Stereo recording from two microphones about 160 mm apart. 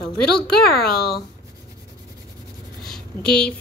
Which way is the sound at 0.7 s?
75° left (ahead or behind).